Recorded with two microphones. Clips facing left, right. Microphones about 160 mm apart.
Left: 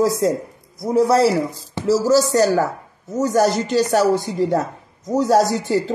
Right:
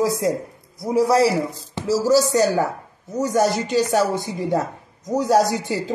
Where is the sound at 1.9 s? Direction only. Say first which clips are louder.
Left 2 dB; 45° left (ahead or behind).